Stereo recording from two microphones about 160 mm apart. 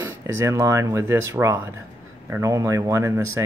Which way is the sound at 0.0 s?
15° right (ahead or behind).